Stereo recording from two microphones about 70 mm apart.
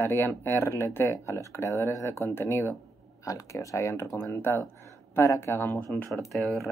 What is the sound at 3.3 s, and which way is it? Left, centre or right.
Speech, left.